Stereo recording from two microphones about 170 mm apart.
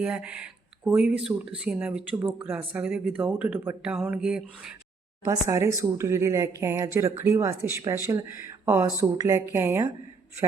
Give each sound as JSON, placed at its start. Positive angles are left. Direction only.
{"t": 0.0, "sound": "speech", "side_deg": -10}
{"t": 3.9, "sound": "a sound", "side_deg": -5}
{"t": 5.2, "sound": "speech", "side_deg": -20}